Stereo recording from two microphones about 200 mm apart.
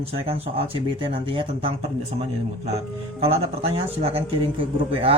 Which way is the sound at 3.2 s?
30° right (ahead or behind).